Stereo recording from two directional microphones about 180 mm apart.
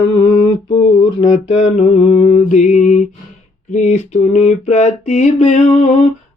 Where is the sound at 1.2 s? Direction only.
40° left (ahead or behind).